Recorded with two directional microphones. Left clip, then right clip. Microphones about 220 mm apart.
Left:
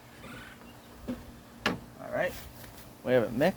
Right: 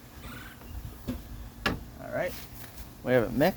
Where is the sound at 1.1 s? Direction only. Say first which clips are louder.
Even; 35° right (ahead or behind).